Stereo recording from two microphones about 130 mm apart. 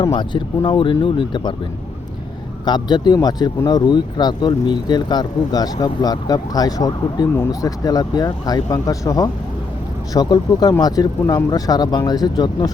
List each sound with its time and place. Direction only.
0.0 s speech: 35° left (ahead or behind)
2.6 s speech: 35° left (ahead or behind)